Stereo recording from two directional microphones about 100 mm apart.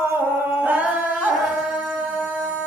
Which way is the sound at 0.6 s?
15° right (ahead or behind).